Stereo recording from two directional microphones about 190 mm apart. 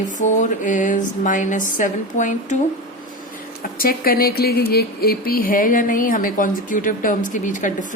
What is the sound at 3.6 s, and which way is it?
A woman's voice, 50° left (ahead or behind).